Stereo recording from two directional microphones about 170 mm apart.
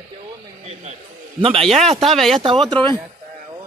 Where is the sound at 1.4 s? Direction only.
35° right (ahead or behind).